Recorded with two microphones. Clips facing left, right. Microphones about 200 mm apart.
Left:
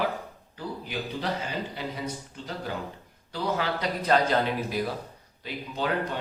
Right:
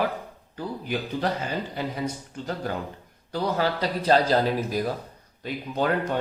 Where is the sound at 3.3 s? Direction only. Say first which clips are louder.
Right 3 dB; 35° right (ahead or behind).